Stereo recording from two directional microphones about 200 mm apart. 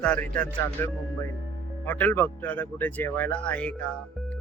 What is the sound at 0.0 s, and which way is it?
Speech, 5° left (ahead or behind).